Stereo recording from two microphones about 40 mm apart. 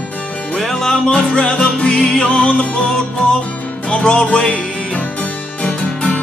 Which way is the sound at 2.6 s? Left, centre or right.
Left.